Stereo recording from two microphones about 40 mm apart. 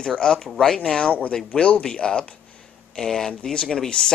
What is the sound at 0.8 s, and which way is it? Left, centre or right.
Speech, left.